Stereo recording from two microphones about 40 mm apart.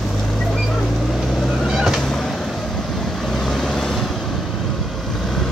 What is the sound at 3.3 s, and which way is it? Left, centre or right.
Vehicle, centre.